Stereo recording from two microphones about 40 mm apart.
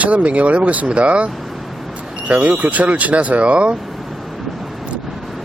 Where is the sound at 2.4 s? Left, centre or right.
Right.